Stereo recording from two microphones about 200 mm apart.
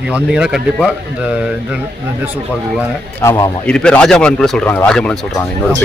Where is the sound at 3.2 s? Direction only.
15° left (ahead or behind).